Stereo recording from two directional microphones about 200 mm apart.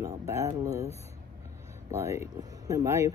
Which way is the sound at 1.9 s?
15° right (ahead or behind).